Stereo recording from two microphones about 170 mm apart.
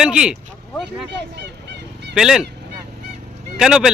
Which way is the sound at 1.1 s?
85° right.